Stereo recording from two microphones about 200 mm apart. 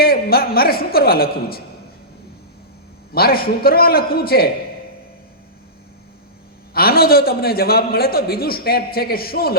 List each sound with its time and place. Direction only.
0.0 s a man's voice: 50° left (ahead or behind)
3.1 s a man's voice: 50° left (ahead or behind)
6.7 s a man's voice: 50° left (ahead or behind)